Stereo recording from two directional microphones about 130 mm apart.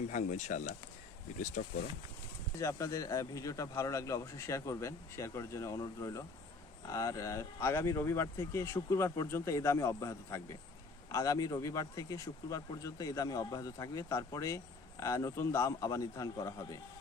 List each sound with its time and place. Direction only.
0.1 s speech: 65° left (ahead or behind); by 1.7 s 90° left
2.6 s speech: 25° left (ahead or behind)